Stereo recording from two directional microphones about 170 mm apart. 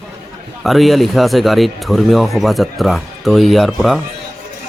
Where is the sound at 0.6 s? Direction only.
Centre (ahead or behind).